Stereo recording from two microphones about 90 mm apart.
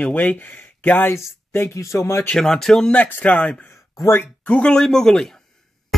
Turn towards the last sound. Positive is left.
turn(degrees=0)  # may be behind; listen again after turning